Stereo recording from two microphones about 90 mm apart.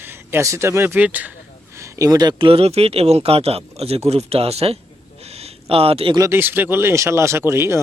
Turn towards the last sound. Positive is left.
turn(degrees=-30)  # may be behind; listen again after turning